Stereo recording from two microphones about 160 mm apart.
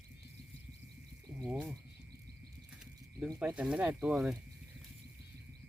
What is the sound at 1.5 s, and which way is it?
Speech, 10° right (ahead or behind).